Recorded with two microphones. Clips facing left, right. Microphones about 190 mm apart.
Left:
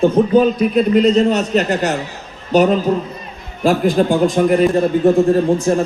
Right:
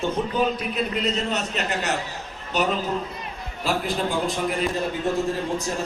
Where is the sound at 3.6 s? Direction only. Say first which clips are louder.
Left 11 dB; 50° left (ahead or behind).